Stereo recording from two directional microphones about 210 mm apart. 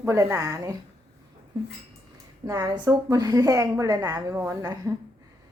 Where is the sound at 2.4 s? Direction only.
15° right (ahead or behind).